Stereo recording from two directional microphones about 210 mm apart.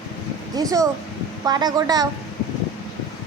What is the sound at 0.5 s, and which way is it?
Speech, 15° right (ahead or behind).